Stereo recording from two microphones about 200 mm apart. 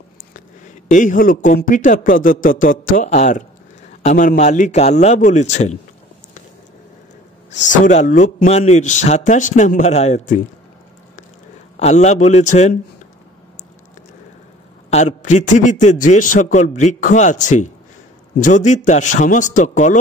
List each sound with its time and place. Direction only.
0.8 s a man's voice: 40° left (ahead or behind)
7.6 s a man's voice: 40° left (ahead or behind)
11.7 s a man's voice: 35° left (ahead or behind)
14.9 s a man's voice: 35° left (ahead or behind)